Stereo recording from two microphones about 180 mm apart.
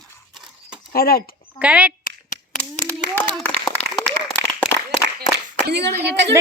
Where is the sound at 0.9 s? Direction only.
55° left (ahead or behind).